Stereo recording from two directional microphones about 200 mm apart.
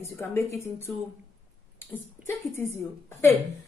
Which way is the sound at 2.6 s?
10° left (ahead or behind).